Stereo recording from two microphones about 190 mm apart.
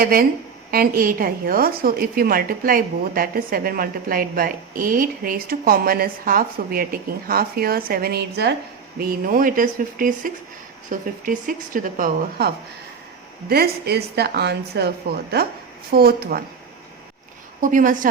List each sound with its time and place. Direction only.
0.0 s a woman's voice: 50° right (ahead or behind)
13.5 s a woman's voice: 55° right (ahead or behind)
17.6 s a woman's voice: 45° right (ahead or behind)